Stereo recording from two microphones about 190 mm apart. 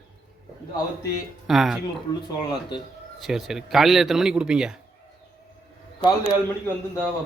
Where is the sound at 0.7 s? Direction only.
15° left (ahead or behind).